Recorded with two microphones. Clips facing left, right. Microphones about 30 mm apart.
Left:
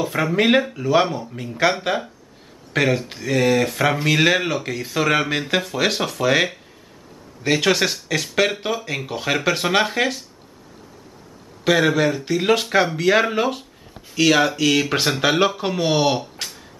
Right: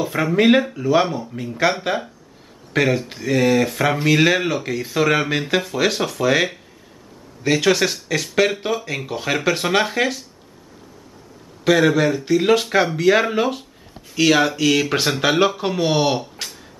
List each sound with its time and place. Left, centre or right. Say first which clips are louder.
0.0 s speech: right 2 dB; centre
11.6 s speech: right 2 dB; centre